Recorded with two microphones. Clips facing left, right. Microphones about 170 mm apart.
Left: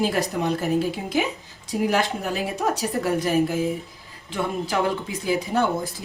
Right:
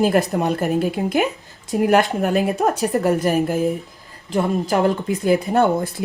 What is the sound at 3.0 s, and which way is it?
A woman's voice, 45° right (ahead or behind).